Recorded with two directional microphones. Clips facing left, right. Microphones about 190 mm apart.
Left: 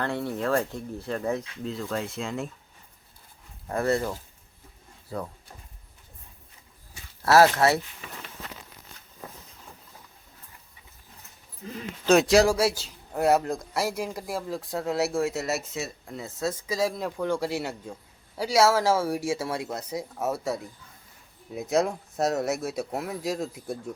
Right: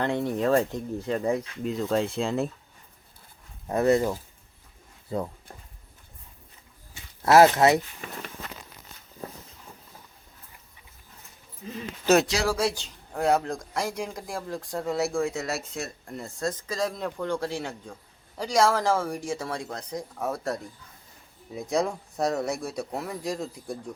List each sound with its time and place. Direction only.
0.0 s speech: 20° right (ahead or behind)
3.7 s speech: 20° right (ahead or behind)
7.3 s speech: 20° right (ahead or behind)
12.1 s speech: 10° right (ahead or behind)
12.5 s a man's voice: 5° left (ahead or behind)